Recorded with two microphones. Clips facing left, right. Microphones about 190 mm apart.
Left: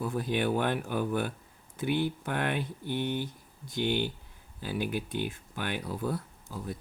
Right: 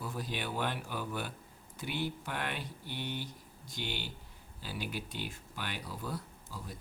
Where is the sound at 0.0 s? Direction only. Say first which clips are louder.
Left 9 dB; 55° left (ahead or behind).